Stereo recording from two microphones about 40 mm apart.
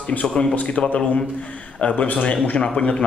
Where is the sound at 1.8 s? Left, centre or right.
Left.